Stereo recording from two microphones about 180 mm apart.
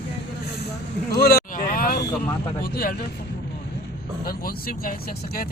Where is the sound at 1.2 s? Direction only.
50° left (ahead or behind).